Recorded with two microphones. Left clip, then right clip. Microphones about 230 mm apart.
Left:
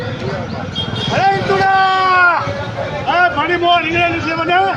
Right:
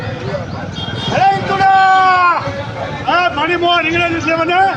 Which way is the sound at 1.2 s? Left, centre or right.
Centre.